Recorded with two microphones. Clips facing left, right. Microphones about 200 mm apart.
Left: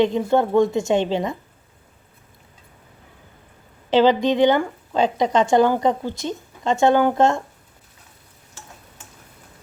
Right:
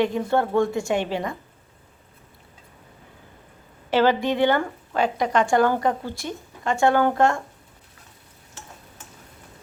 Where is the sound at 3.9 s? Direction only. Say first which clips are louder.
Left 4 dB; 20° left (ahead or behind).